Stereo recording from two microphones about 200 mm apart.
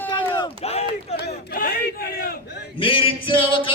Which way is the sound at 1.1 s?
55° left (ahead or behind).